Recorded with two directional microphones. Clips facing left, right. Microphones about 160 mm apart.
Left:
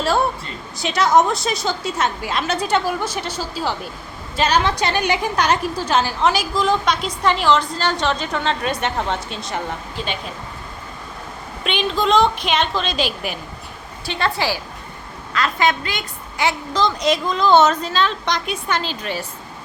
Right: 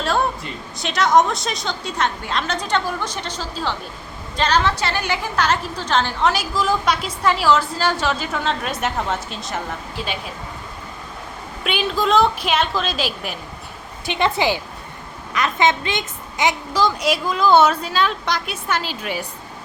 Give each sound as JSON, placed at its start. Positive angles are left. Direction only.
{"t": 0.8, "sound": "a woman's voice", "side_deg": 0}
{"t": 11.6, "sound": "a woman's voice", "side_deg": -5}
{"t": 14.0, "sound": "a woman's voice", "side_deg": -20}